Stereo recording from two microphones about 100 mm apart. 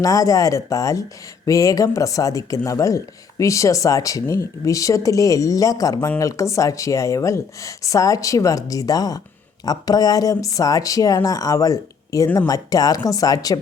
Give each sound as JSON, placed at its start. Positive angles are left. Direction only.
{"t": 0.0, "sound": "speech", "side_deg": 35}